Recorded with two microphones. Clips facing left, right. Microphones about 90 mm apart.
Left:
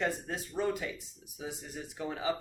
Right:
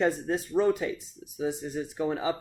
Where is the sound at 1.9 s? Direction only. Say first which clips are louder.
Right 7 dB; 35° right (ahead or behind).